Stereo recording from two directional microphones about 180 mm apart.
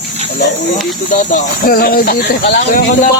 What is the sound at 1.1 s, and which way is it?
Speech, 50° left (ahead or behind).